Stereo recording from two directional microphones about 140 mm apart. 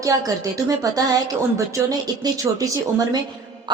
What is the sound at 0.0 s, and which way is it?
Speech, 25° right (ahead or behind).